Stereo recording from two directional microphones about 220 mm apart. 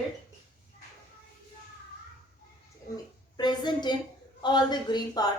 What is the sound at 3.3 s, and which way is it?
A woman's voice, 20° left (ahead or behind).